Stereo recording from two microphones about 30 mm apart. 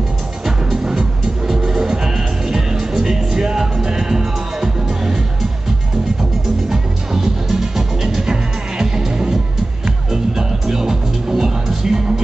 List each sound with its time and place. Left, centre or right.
1.8 s music: centre
6.7 s music: centre